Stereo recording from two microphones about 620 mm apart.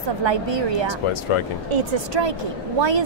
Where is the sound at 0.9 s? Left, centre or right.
Left.